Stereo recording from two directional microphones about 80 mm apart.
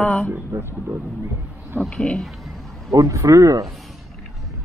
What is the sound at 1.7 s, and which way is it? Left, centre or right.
Speech, centre.